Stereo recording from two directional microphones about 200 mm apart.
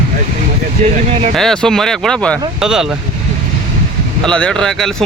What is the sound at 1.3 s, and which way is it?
Speech, 5° left (ahead or behind).